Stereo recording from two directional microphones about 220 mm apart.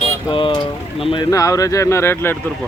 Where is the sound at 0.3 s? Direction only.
20° left (ahead or behind).